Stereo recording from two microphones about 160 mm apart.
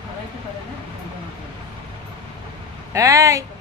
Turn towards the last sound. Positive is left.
turn(degrees=-20)  # may be behind; listen again after turning